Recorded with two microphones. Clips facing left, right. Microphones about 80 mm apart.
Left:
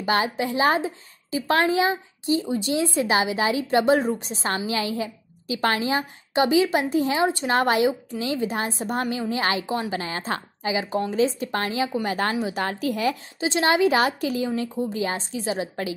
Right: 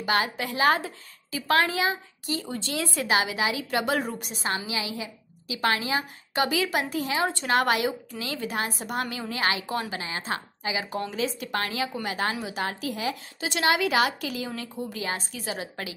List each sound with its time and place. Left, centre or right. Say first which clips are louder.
0.0 s a woman's voice: left 3 dB; left
9.9 s a woman's voice: left 4 dB; left
13.4 s a woman's voice: left 4 dB; left